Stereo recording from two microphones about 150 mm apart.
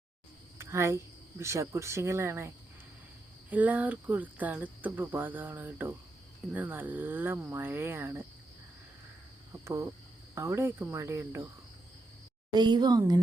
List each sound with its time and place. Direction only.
0.6 s speech: 20° right (ahead or behind)
3.5 s speech: 10° right (ahead or behind)
9.5 s speech: 20° right (ahead or behind)
12.5 s a woman's voice: 30° right (ahead or behind)